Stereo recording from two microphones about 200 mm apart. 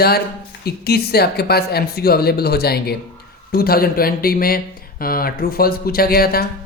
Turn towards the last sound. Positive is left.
turn(degrees=50)  # may be behind; listen again after turning